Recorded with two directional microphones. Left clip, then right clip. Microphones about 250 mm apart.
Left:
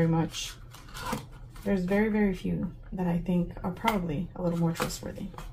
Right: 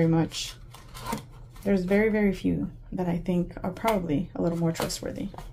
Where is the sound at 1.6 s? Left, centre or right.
Right.